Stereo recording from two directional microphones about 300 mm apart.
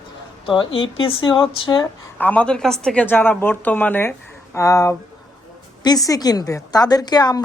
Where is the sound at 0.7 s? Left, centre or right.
Left.